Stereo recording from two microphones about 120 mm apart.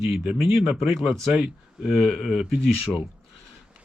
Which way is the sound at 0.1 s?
15° right (ahead or behind).